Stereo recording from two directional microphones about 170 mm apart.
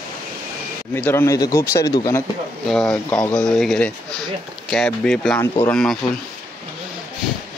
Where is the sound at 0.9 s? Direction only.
15° left (ahead or behind).